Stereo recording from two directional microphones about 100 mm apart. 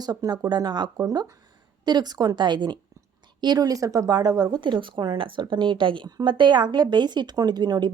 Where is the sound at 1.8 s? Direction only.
45° right (ahead or behind).